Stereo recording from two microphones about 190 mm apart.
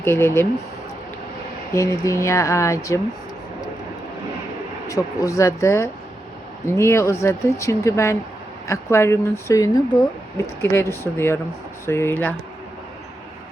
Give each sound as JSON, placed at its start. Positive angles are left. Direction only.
{"t": 0.0, "sound": "speech", "side_deg": 15}
{"t": 1.7, "sound": "speech", "side_deg": 15}
{"t": 4.9, "sound": "speech", "side_deg": 15}